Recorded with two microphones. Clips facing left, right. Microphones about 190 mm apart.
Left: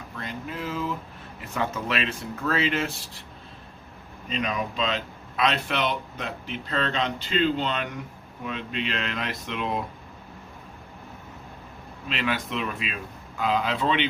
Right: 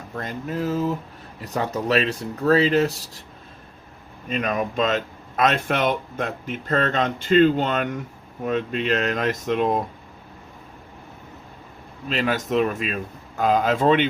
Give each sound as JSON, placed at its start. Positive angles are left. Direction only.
{"t": 0.1, "sound": "a sound", "side_deg": -45}
{"t": 1.4, "sound": "speech", "side_deg": -40}
{"t": 4.3, "sound": "speech", "side_deg": -50}
{"t": 12.0, "sound": "speech", "side_deg": -40}